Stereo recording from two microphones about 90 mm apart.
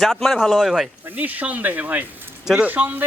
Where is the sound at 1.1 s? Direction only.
20° right (ahead or behind).